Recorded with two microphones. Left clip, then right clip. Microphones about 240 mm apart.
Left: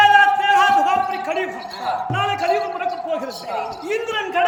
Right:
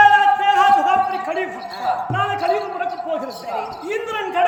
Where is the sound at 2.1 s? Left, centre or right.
Centre.